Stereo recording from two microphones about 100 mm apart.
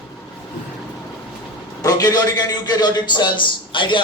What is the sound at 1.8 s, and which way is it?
A man's voice, 40° left (ahead or behind).